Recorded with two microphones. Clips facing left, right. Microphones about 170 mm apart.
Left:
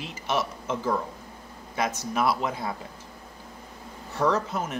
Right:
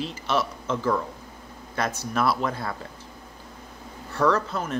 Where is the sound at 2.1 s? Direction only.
15° left (ahead or behind).